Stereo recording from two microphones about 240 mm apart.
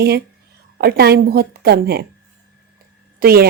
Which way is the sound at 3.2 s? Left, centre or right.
Right.